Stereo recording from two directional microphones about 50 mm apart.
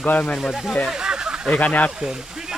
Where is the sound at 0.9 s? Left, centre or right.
Centre.